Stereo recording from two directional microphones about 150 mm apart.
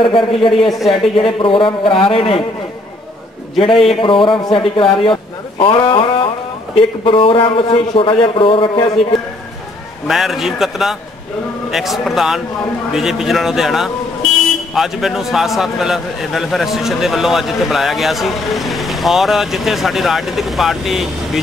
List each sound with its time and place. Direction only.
0.0 s a man's voice: 35° left (ahead or behind)
0.5 s a man's voice: centre (ahead or behind)
1.1 s a man's voice: 35° left (ahead or behind)
3.5 s a man's voice: 40° left (ahead or behind)
10.0 s a man's voice: centre (ahead or behind)